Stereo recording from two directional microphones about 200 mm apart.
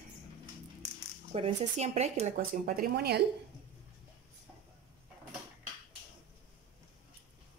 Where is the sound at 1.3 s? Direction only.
30° right (ahead or behind).